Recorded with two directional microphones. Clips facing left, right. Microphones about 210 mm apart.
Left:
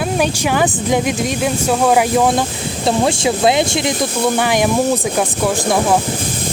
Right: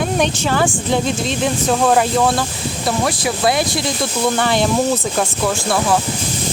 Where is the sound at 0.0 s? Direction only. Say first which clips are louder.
Left 1 dB; 10° left (ahead or behind).